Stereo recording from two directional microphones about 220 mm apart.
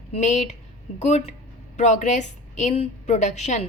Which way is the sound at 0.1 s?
30° left (ahead or behind).